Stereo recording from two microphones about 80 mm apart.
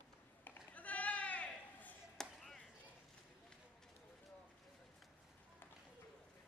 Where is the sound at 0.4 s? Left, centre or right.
Centre.